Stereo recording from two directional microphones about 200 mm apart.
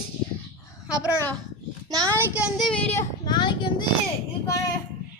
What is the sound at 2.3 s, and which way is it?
Speech, 5° right (ahead or behind).